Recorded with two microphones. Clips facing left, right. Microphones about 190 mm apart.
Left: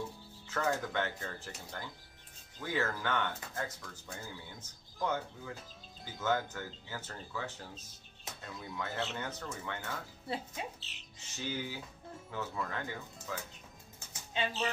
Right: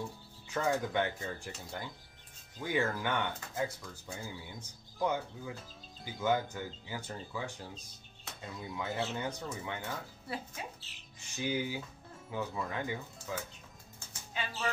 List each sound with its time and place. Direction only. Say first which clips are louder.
0.5 s speech: right 2 dB; 15° right (ahead or behind)
10.3 s a woman's voice: left 2 dB; 20° left (ahead or behind)
11.1 s speech: right 5 dB; 10° right (ahead or behind)
14.3 s speech: left 3 dB; 20° left (ahead or behind)